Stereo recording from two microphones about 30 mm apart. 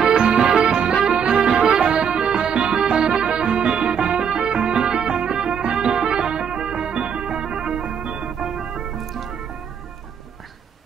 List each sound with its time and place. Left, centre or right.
0.1 s music: right
1.5 s music: centre
1.8 s music: right
8.4 s music: centre